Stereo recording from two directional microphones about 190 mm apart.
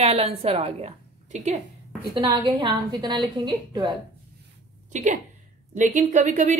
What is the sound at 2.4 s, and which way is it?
A woman's voice, 25° right (ahead or behind).